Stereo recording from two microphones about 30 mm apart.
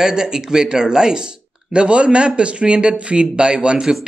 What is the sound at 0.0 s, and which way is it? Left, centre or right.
Speech, right.